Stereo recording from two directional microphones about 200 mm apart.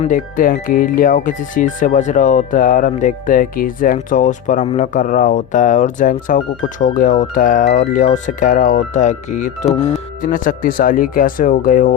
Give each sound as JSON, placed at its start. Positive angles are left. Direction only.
{"t": 0.0, "sound": "speech", "side_deg": 40}